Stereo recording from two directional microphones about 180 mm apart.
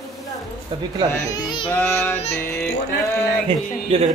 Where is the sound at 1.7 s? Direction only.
10° left (ahead or behind).